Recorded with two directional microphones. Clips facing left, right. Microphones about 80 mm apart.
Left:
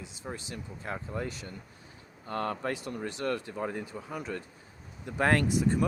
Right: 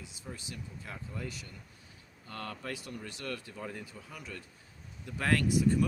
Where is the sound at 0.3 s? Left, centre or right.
Left.